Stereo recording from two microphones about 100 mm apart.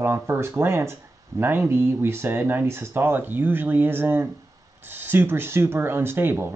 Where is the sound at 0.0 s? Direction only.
25° right (ahead or behind).